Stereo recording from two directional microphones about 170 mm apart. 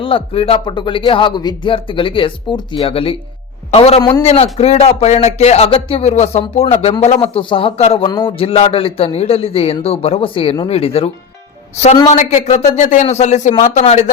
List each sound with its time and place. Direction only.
0.0 s speech: 30° left (ahead or behind)